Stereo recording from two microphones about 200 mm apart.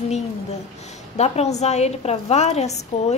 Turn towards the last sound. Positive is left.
turn(degrees=35)  # may be behind; listen again after turning